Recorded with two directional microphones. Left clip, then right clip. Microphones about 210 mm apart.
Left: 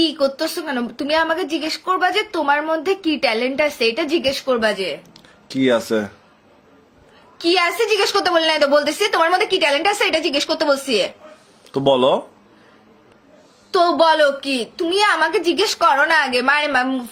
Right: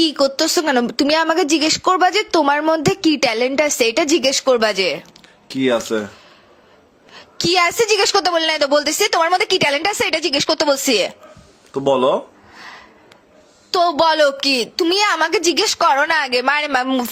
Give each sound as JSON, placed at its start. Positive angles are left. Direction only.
{"t": 0.0, "sound": "a woman's voice", "side_deg": -50}
{"t": 5.5, "sound": "speech", "side_deg": -5}
{"t": 7.3, "sound": "a woman's voice", "side_deg": -55}
{"t": 11.7, "sound": "speech", "side_deg": 15}
{"t": 13.7, "sound": "a woman's voice", "side_deg": -55}